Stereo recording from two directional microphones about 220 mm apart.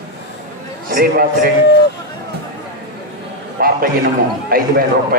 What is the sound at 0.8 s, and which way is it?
Speech, 40° right (ahead or behind).